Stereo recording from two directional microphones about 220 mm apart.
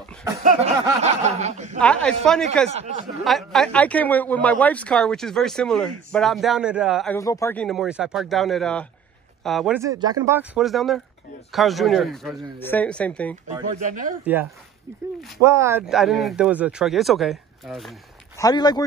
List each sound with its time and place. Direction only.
0.4 s a sound: 35° right (ahead or behind)
1.0 s snicker: 30° right (ahead or behind)
1.8 s speech: 5° left (ahead or behind)
2.7 s speech: 30° right (ahead or behind)
3.3 s speech: centre (ahead or behind)
7.1 s speech: 15° left (ahead or behind)
7.6 s speech: centre (ahead or behind)
9.8 s speech: 15° right (ahead or behind); by 13.4 s 5° left (ahead or behind)
13.8 s a sound: 35° right (ahead or behind)
14.2 s speech: 10° right (ahead or behind)
15.9 s speech: centre (ahead or behind)
18.4 s speech: 20° left (ahead or behind)